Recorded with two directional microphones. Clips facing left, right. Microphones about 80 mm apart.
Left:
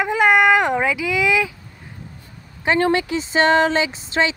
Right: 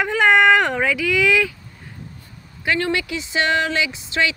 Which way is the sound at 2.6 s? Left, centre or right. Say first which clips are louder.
Left 4 dB; left.